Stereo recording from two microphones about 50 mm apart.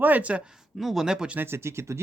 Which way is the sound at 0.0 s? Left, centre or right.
Right.